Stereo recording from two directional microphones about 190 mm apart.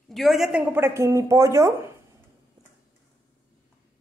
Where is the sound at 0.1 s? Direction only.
Centre (ahead or behind).